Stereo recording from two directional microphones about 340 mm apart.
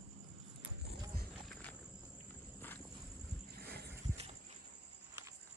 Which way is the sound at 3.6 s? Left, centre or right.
Right.